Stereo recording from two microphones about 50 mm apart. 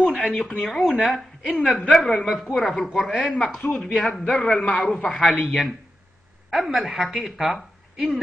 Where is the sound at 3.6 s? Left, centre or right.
Left.